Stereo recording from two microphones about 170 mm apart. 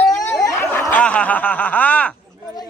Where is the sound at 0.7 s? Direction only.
10° left (ahead or behind).